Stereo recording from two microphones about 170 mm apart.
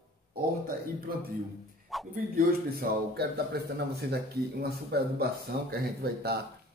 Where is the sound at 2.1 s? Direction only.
60° right (ahead or behind).